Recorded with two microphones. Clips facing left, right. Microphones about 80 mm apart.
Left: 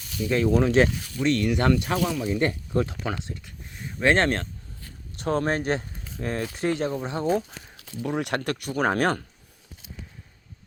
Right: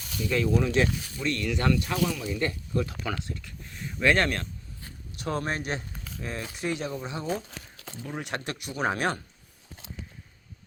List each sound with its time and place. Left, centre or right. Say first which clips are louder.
0.3 s speech: left 4 dB; left
1.2 s speech: left 6 dB; left
8.0 s speech: left 7 dB; left